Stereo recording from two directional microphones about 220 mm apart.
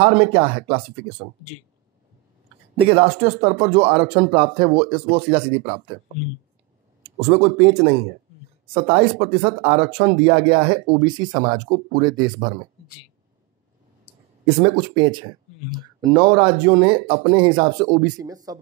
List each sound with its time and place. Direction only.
0.0 s speech: 25° right (ahead or behind)
2.7 s speech: 25° right (ahead or behind)
7.2 s speech: 30° right (ahead or behind)
14.4 s speech: 20° right (ahead or behind)